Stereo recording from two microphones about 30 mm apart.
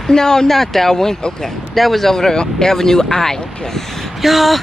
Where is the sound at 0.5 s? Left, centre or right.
Centre.